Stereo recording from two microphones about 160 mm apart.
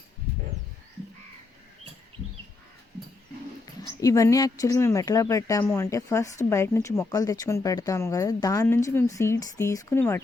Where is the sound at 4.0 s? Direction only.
20° left (ahead or behind).